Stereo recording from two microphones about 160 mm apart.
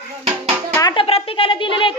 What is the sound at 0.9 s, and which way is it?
Speech, 35° left (ahead or behind).